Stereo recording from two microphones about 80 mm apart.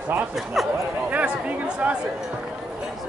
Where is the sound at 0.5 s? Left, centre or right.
Centre.